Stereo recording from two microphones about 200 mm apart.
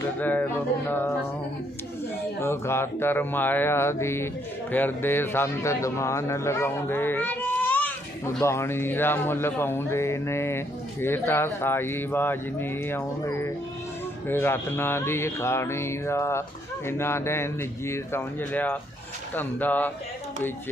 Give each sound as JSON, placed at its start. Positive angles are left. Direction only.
{"t": 0.2, "sound": "a man's voice", "side_deg": 10}
{"t": 2.4, "sound": "a man's voice", "side_deg": 10}